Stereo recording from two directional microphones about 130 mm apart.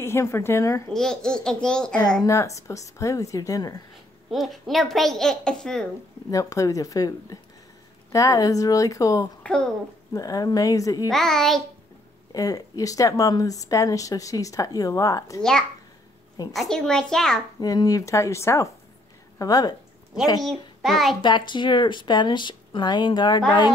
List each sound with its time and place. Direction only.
0.0 s speech: 20° left (ahead or behind)
0.9 s a child's voice: 5° left (ahead or behind)
2.2 s speech: 25° left (ahead or behind)
4.3 s a child's voice: centre (ahead or behind)
6.3 s speech: 25° left (ahead or behind)
9.4 s speech: 5° left (ahead or behind)
10.1 s speech: 25° left (ahead or behind)
11.1 s a child's voice: 5° left (ahead or behind)
12.3 s speech: 30° left (ahead or behind)
16.5 s a child's voice: 5° left (ahead or behind)
17.6 s speech: 30° left (ahead or behind)
20.4 s a child's voice: centre (ahead or behind)
21.2 s speech: 35° left (ahead or behind)